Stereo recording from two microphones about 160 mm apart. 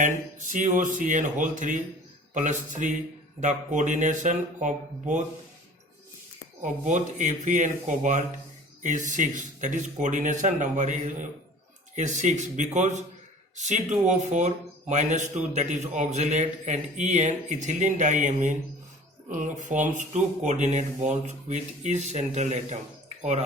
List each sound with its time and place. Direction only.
0.0 s speech: 50° right (ahead or behind)
6.6 s speech: 50° right (ahead or behind)